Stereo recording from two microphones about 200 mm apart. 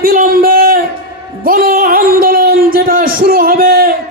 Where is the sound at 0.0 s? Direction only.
45° right (ahead or behind).